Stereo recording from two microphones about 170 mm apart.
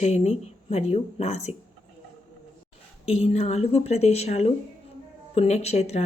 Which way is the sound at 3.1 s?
40° left (ahead or behind).